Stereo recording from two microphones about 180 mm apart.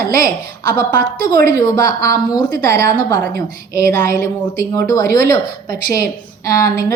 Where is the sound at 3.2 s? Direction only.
55° right (ahead or behind).